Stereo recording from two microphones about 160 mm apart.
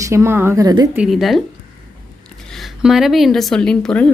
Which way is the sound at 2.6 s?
Centre (ahead or behind).